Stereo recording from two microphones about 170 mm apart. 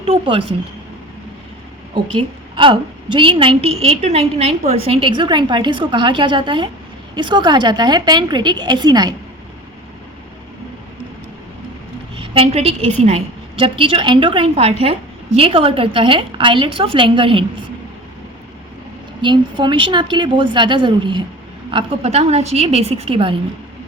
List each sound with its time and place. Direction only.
0.0 s speech: 35° right (ahead or behind)
2.1 s a woman's voice: 30° right (ahead or behind)
12.1 s a woman's voice: 30° right (ahead or behind)
19.2 s a woman's voice: 25° right (ahead or behind)